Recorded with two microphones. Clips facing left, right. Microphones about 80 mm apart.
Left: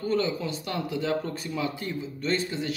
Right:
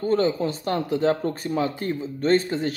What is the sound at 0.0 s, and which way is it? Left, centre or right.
Speech, right.